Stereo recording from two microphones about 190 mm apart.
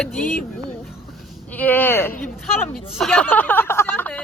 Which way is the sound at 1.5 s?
10° left (ahead or behind).